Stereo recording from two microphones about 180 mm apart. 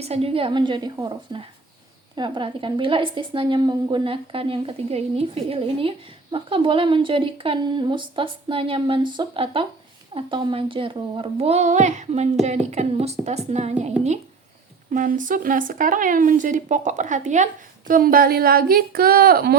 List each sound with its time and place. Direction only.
0.0 s a woman's voice: 35° right (ahead or behind); by 19.5 s 60° right (ahead or behind)